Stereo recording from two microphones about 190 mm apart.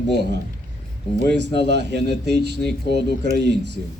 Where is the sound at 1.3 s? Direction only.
60° right (ahead or behind).